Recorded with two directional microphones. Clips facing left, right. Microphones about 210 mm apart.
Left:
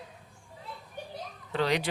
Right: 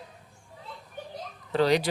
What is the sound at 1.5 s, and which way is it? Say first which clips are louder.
Speech: right 5 dB; 35° right (ahead or behind).